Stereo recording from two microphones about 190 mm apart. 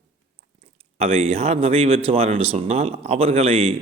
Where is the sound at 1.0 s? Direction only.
30° right (ahead or behind).